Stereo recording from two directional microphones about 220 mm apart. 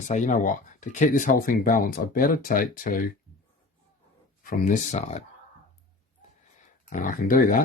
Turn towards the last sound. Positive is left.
turn(degrees=40)  # may be behind; listen again after turning